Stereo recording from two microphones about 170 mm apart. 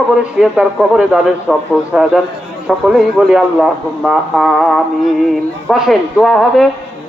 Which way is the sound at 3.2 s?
Centre (ahead or behind).